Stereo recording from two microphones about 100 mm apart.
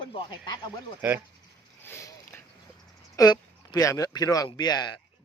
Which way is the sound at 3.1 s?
40° left (ahead or behind).